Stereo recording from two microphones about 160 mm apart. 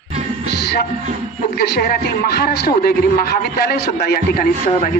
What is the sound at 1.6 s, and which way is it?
Speech, 75° left (ahead or behind).